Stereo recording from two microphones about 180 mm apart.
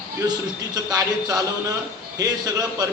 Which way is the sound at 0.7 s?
20° right (ahead or behind).